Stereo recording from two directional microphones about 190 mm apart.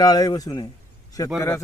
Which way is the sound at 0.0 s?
20° left (ahead or behind).